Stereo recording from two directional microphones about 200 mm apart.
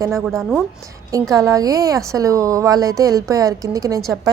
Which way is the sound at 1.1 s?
15° right (ahead or behind).